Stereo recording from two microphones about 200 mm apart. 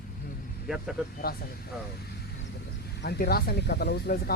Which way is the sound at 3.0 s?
55° left (ahead or behind).